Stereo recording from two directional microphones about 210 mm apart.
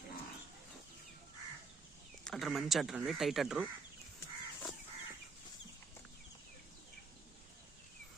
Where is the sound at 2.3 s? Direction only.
Centre (ahead or behind).